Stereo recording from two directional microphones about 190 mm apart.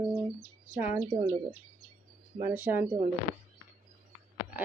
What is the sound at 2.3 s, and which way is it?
Speech, 10° right (ahead or behind).